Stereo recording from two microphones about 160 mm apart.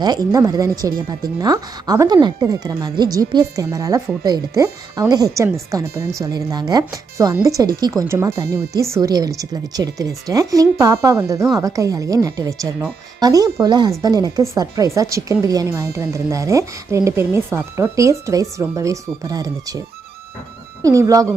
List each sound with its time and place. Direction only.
0.0 s a woman's voice: 25° right (ahead or behind)
20.8 s a woman's voice: 20° right (ahead or behind)